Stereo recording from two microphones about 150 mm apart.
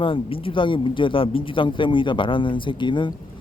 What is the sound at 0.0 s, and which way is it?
Speech, 35° left (ahead or behind).